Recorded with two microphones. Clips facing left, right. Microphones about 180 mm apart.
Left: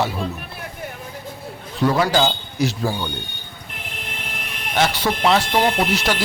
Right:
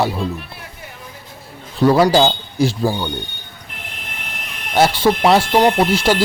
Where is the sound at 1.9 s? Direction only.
30° right (ahead or behind).